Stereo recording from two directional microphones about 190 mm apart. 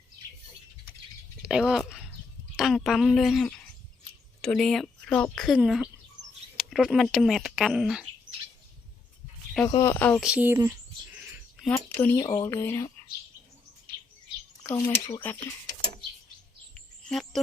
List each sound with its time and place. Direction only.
1.4 s bird: 5° right (ahead or behind)
2.6 s speech: centre (ahead or behind)
9.6 s speech: 15° left (ahead or behind)
10.2 s speech: 5° right (ahead or behind)
11.9 s speech: 10° left (ahead or behind)
12.2 s speech: 20° left (ahead or behind)
14.6 s speech: 20° left (ahead or behind)
15.2 s speech: 10° left (ahead or behind)
16.7 s bird vocalization: centre (ahead or behind)